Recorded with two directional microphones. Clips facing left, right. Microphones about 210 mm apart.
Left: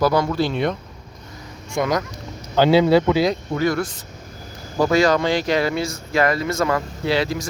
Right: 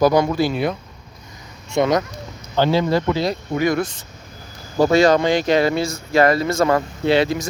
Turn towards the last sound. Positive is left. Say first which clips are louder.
# right 4 dB
turn(degrees=-20)  # may be behind; listen again after turning